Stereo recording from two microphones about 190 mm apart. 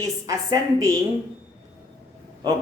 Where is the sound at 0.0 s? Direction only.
20° right (ahead or behind).